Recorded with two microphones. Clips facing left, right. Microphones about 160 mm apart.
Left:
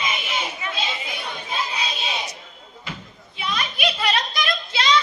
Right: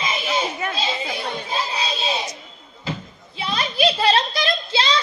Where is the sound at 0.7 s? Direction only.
35° right (ahead or behind).